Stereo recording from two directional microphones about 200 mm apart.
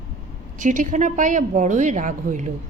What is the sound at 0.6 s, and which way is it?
A woman's voice, 40° right (ahead or behind).